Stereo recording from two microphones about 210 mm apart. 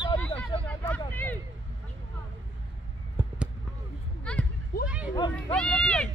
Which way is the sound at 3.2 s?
10° right (ahead or behind).